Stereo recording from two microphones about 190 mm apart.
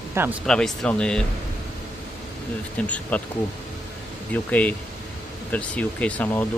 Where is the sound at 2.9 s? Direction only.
10° left (ahead or behind).